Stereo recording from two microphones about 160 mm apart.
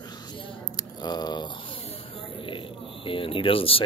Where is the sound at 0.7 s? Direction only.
25° left (ahead or behind).